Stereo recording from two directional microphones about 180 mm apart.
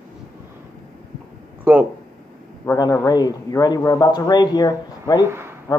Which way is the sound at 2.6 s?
15° left (ahead or behind).